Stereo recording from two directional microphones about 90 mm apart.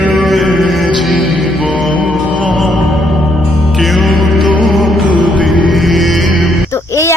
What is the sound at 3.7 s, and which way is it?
Music, centre (ahead or behind).